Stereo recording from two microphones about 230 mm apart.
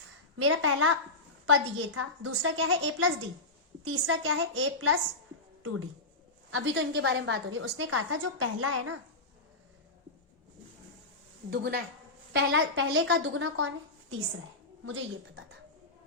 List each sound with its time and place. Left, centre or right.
0.3 s a woman's voice: right
6.5 s a woman's voice: right
11.5 s a woman's voice: right
12.3 s a woman's voice: right
14.8 s a woman's voice: right